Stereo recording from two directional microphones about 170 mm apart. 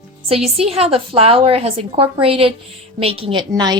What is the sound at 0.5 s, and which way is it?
A woman's voice, 35° right (ahead or behind).